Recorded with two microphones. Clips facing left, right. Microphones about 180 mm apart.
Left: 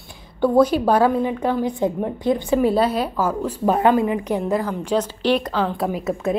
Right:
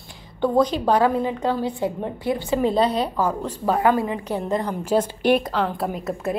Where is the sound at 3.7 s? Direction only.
20° left (ahead or behind).